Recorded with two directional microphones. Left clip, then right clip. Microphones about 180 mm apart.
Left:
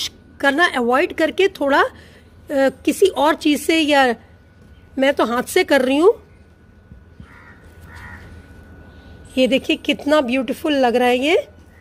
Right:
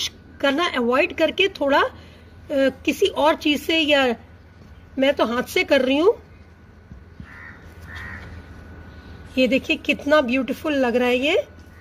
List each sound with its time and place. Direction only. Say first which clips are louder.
0.0 s a woman's voice: left 3 dB; 30° left (ahead or behind)
9.3 s speech: left 3 dB; 40° left (ahead or behind)